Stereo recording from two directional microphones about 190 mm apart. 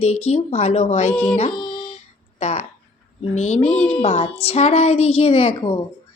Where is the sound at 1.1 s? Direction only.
10° left (ahead or behind).